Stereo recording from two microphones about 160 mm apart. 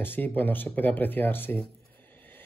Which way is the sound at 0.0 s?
10° left (ahead or behind).